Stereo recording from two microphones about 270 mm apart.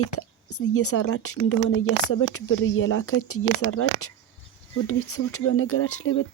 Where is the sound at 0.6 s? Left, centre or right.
Left.